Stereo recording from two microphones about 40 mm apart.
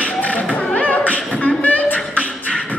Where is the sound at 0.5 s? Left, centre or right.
Left.